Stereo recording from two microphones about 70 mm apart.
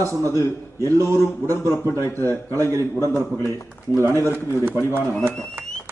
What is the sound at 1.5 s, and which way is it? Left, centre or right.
A man's voice, right.